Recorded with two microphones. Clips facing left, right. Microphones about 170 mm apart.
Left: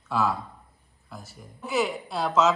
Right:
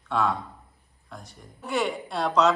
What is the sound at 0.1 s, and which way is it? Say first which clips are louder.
Speech: even; 5° left (ahead or behind).